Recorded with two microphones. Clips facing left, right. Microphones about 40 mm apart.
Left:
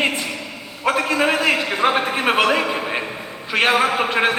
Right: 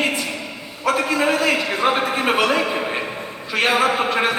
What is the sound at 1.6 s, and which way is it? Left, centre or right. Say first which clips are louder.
A man's voice: left 1 dB; centre.